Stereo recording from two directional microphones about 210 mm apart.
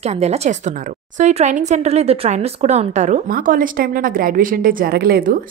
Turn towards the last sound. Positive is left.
turn(degrees=-45)  # may be behind; listen again after turning